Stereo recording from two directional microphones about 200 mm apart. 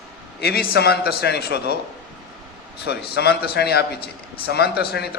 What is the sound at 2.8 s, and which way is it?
A man's voice, 55° left (ahead or behind).